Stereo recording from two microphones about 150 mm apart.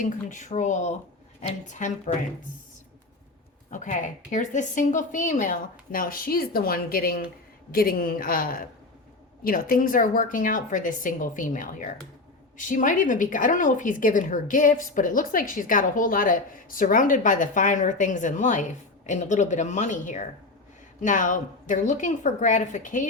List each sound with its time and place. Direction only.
0.0 s a woman's voice: 55° left (ahead or behind)
3.7 s a woman's voice: 55° left (ahead or behind)